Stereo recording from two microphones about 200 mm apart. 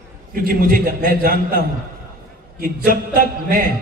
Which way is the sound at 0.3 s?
45° right (ahead or behind).